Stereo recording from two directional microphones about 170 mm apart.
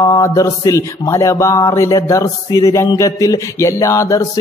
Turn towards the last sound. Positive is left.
turn(degrees=20)  # may be behind; listen again after turning